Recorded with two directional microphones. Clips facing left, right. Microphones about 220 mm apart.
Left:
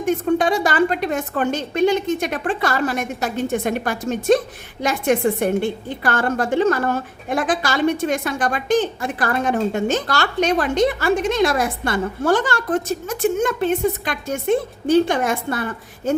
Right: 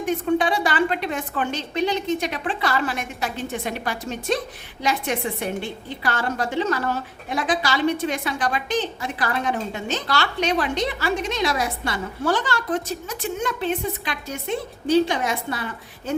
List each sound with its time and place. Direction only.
0.0 s a woman's voice: 45° left (ahead or behind)